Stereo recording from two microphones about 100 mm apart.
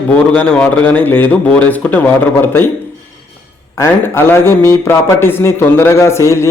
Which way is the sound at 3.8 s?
25° left (ahead or behind).